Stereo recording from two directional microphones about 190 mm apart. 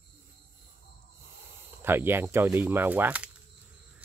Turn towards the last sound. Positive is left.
turn(degrees=-10)  # may be behind; listen again after turning